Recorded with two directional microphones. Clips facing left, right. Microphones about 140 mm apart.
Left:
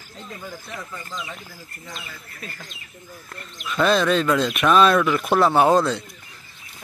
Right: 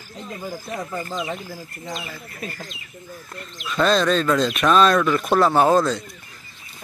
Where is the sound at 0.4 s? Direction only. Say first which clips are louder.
Right 7 dB; 35° right (ahead or behind).